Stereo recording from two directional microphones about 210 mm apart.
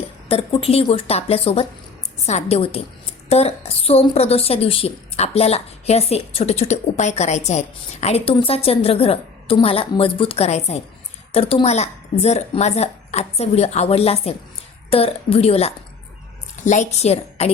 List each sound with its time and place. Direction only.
0.3 s a woman's voice: 25° left (ahead or behind)